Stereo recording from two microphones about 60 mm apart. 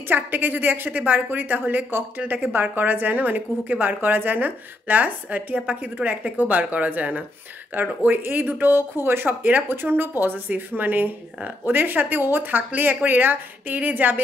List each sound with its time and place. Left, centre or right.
0.1 s a woman's voice: right